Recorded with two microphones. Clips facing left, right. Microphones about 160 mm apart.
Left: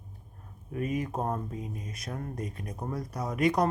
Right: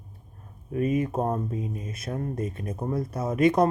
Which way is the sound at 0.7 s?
25° right (ahead or behind).